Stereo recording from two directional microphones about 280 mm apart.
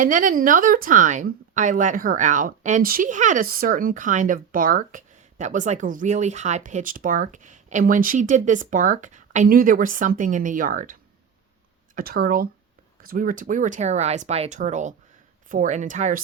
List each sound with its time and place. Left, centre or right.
0.0 s a woman's voice: right
11.9 s a woman's voice: right